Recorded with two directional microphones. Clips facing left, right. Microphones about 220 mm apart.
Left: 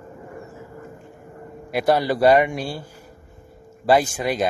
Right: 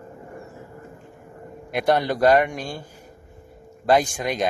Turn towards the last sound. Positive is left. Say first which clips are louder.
# left 1 dB
turn(degrees=5)  # may be behind; listen again after turning